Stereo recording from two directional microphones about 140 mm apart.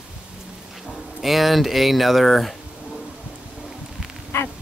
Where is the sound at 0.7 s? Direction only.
5° right (ahead or behind).